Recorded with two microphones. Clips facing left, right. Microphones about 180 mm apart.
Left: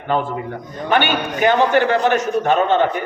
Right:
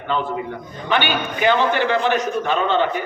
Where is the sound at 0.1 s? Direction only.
45° left (ahead or behind).